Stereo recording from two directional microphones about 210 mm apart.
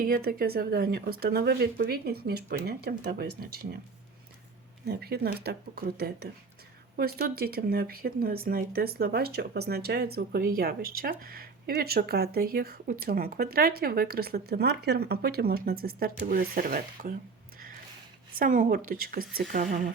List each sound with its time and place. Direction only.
0.0 s speech: 45° right (ahead or behind)
4.9 s speech: 50° right (ahead or behind)
18.3 s speech: 40° right (ahead or behind)